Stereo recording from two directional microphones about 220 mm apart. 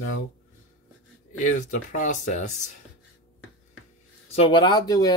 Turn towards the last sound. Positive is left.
turn(degrees=15)  # may be behind; listen again after turning